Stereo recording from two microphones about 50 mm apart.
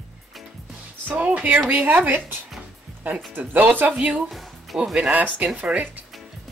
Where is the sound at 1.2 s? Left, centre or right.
Right.